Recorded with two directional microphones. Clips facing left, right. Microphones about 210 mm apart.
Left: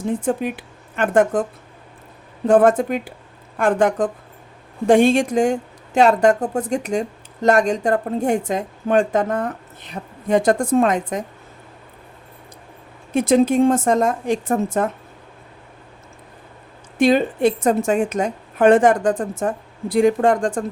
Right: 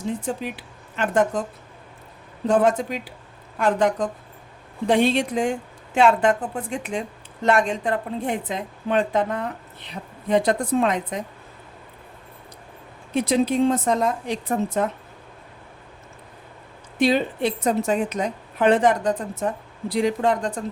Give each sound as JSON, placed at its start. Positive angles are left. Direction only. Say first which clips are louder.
{"t": 0.0, "sound": "speech", "louder": "left 6 dB", "side_deg": 50}
{"t": 2.5, "sound": "a woman's voice", "louder": "left 5 dB", "side_deg": 55}
{"t": 13.1, "sound": "a woman's voice", "louder": "left 5 dB", "side_deg": 50}
{"t": 17.0, "sound": "a woman's voice", "louder": "left 5 dB", "side_deg": 50}